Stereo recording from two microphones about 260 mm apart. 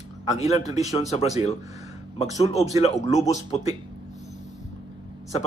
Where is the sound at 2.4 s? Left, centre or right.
Left.